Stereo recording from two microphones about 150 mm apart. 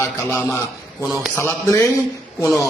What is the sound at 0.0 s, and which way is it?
A man's voice, 15° left (ahead or behind).